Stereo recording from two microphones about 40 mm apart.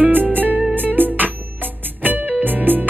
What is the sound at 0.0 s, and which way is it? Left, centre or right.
Music, right.